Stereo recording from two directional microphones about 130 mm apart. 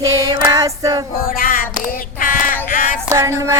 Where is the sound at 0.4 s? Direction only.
30° right (ahead or behind).